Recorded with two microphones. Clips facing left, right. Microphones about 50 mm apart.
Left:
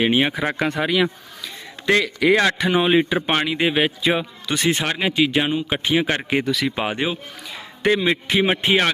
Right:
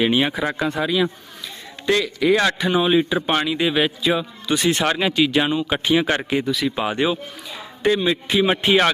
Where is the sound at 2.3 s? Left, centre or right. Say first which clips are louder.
Even; left.